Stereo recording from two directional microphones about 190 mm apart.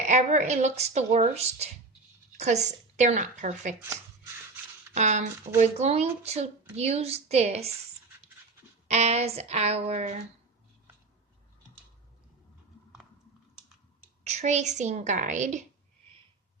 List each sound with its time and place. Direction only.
0.0 s speech: 35° right (ahead or behind)
4.9 s speech: 40° right (ahead or behind)
8.9 s speech: 35° right (ahead or behind)
14.3 s speech: 35° right (ahead or behind)